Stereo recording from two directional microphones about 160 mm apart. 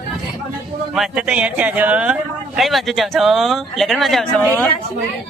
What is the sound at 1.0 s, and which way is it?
Speech, 5° right (ahead or behind).